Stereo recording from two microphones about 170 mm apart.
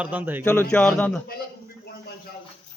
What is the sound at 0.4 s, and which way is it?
Speech, 10° left (ahead or behind).